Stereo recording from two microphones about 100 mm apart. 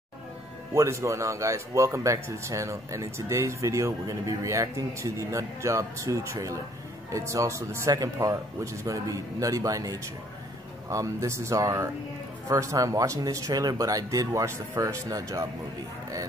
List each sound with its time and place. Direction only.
0.7 s speech: 30° right (ahead or behind)